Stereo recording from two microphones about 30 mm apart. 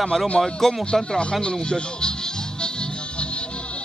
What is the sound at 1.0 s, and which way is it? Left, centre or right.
Speech, left.